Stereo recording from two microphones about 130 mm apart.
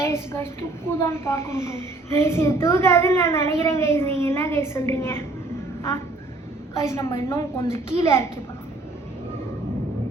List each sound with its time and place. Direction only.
0.0 s a woman's voice: 20° left (ahead or behind)
6.8 s a child's voice: 20° left (ahead or behind)